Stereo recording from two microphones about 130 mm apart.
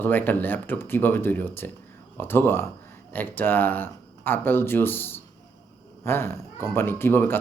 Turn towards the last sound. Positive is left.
turn(degrees=15)  # may be behind; listen again after turning